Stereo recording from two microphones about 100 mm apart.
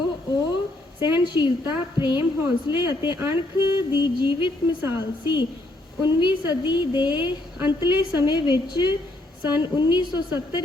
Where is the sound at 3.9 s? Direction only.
50° left (ahead or behind).